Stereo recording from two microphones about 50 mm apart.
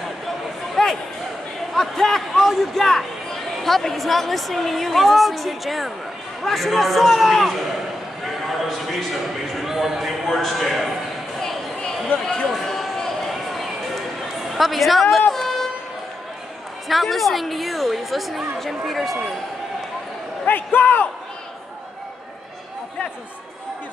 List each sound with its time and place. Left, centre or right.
0.8 s basketball bounce: centre
1.7 s a man's voice: centre
11.3 s a sound: centre
12.4 s run: centre
13.3 s a sound: centre
14.5 s speech: centre
15.3 s a sound: centre
16.8 s speech: centre
20.4 s speech: left